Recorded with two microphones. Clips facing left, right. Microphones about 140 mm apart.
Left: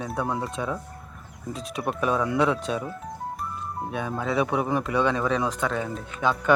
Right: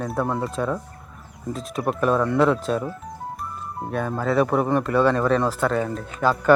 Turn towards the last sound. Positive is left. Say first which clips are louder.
# right 4 dB
turn(degrees=0)  # may be behind; listen again after turning